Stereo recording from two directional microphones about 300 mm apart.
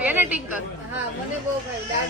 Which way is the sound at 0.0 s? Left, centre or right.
Centre.